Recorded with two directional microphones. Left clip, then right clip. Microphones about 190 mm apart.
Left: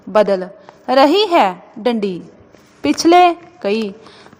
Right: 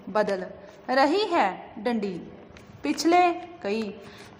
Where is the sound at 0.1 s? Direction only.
35° left (ahead or behind).